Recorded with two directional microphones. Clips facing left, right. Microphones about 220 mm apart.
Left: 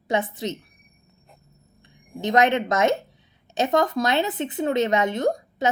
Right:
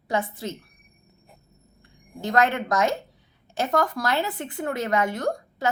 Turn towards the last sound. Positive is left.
turn(degrees=20)  # may be behind; listen again after turning